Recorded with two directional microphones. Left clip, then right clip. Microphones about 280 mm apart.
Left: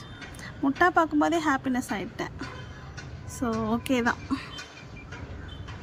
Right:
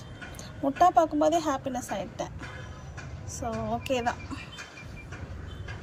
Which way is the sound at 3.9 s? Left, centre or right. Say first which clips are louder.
Left 3 dB; centre.